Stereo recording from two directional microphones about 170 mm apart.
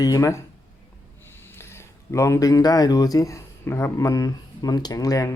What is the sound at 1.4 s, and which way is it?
Speech, 15° left (ahead or behind).